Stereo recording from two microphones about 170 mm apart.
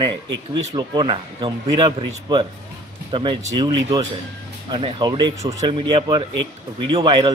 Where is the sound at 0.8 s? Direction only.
30° right (ahead or behind).